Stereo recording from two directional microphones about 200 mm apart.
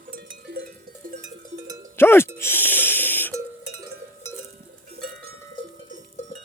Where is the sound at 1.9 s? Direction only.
10° left (ahead or behind).